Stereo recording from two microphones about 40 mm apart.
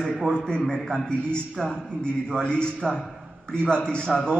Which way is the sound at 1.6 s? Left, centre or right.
Left.